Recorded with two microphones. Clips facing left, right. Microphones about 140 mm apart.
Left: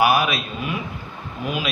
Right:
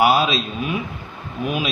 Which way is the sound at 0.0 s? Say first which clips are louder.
Right 2 dB; 25° right (ahead or behind).